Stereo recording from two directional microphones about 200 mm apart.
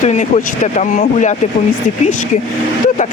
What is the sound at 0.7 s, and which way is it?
Speech, 35° left (ahead or behind).